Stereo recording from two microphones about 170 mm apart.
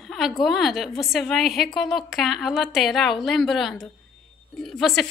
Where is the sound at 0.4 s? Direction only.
Centre (ahead or behind).